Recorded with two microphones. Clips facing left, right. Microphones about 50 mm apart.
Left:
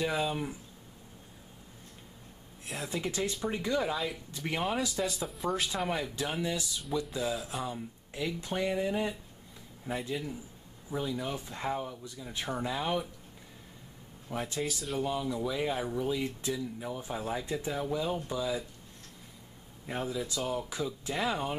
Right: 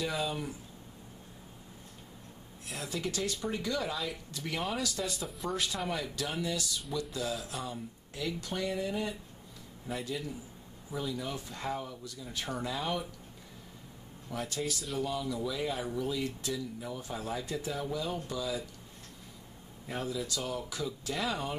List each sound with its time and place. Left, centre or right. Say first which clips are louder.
0.0 s speech: left 3 dB; centre
2.8 s speech: left 2 dB; centre
5.0 s speech: left 3 dB; centre
6.1 s speech: left 2 dB; left
14.3 s speech: left 1 dB; centre
15.0 s speech: left 2 dB; left
19.9 s speech: left 1 dB; centre